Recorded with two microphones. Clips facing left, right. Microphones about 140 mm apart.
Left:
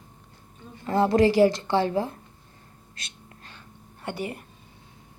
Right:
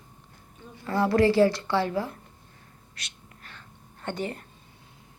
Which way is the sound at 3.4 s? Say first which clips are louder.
Right 2 dB; 20° left (ahead or behind).